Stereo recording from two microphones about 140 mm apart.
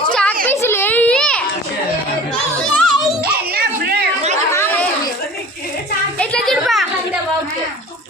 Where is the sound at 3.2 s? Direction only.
90° right.